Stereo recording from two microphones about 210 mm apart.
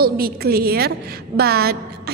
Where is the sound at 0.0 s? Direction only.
45° right (ahead or behind).